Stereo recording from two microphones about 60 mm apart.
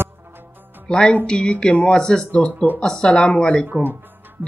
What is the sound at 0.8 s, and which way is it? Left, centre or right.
Music, centre.